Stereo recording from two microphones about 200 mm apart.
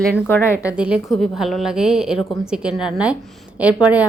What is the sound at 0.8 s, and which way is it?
A woman's voice, 5° right (ahead or behind).